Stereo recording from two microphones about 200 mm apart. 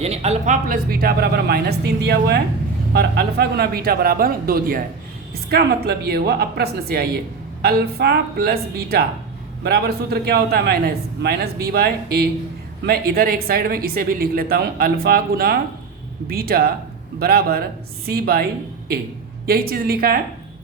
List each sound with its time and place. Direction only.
0.0 s speech: 30° right (ahead or behind); by 18.4 s 50° right (ahead or behind)
19.5 s speech: 50° right (ahead or behind)